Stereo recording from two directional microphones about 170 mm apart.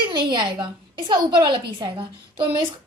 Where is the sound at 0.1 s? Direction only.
25° right (ahead or behind).